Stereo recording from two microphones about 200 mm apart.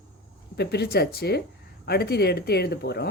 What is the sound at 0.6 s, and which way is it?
Speech, 55° left (ahead or behind).